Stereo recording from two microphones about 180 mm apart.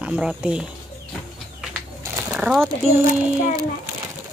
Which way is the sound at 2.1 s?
5° right (ahead or behind).